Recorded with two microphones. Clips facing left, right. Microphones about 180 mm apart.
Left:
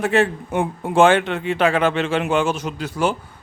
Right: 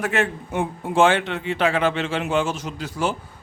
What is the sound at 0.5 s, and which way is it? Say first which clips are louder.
A man's voice: left 3 dB; 55° left (ahead or behind).